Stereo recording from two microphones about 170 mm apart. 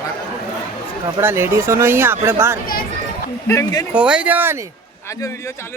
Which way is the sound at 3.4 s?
20° left (ahead or behind).